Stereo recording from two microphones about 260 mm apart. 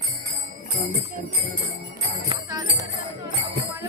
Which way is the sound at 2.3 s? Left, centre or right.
Centre.